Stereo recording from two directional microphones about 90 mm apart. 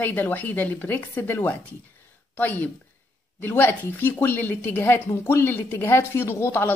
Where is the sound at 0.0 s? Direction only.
20° left (ahead or behind).